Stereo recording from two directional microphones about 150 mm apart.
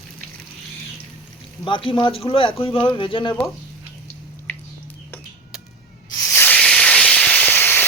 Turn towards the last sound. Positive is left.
turn(degrees=10)  # may be behind; listen again after turning